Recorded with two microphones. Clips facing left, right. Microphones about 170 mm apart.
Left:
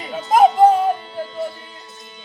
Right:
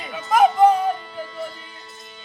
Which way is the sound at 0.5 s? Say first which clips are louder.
Left 2 dB; 25° left (ahead or behind).